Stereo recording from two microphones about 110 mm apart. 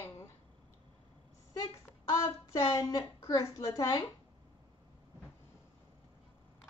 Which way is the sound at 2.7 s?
30° left (ahead or behind).